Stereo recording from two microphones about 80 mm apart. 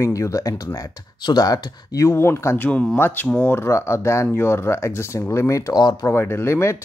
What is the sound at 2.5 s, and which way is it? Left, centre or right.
Speech, left.